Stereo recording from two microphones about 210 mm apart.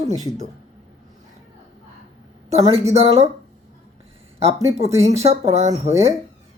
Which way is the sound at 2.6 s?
25° right (ahead or behind).